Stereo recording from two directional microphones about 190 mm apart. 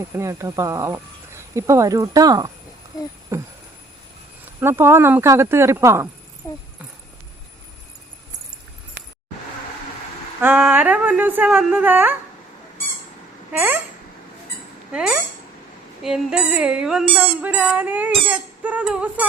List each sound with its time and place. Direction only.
0.1 s speech: 15° right (ahead or behind)
4.6 s speech: 10° right (ahead or behind)
6.4 s speech: 15° left (ahead or behind)
10.4 s speech: 10° right (ahead or behind)
13.5 s a sound: 5° right (ahead or behind)
14.9 s a sound: 5° right (ahead or behind)
17.2 s speech: 10° right (ahead or behind)